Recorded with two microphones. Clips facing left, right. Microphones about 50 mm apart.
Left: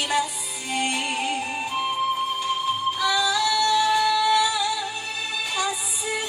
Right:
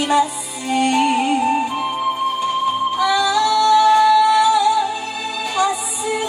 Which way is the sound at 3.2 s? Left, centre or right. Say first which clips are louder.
Right 6 dB; right.